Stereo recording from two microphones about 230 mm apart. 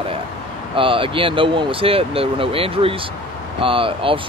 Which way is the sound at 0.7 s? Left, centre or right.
Right.